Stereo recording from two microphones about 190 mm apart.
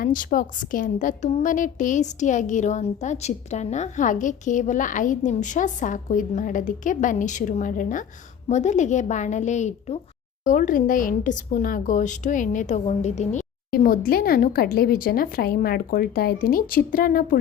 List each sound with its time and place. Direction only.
0.0 s a woman's voice: 45° left (ahead or behind)
13.7 s a woman's voice: 50° left (ahead or behind)